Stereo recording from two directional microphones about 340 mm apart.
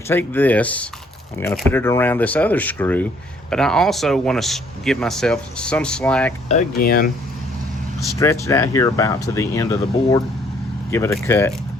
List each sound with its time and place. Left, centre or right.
0.1 s speech: centre
6.5 s speech: left
8.0 s speech: centre